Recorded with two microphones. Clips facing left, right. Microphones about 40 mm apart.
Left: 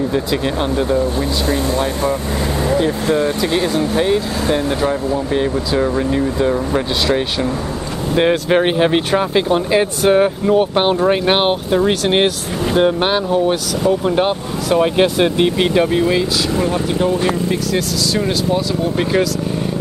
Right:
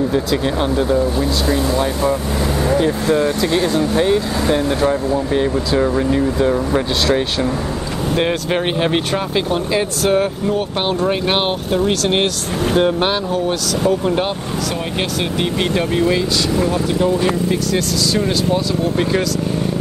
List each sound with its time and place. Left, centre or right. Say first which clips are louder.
0.1 s speech: even; centre
2.7 s speech: even; left
3.5 s speech: right 1 dB; centre
8.1 s speech: left 4 dB; centre